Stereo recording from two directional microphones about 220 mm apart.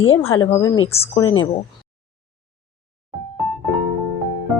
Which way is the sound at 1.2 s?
65° left (ahead or behind).